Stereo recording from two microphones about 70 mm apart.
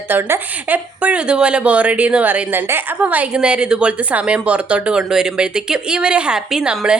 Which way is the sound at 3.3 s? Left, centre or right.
Centre.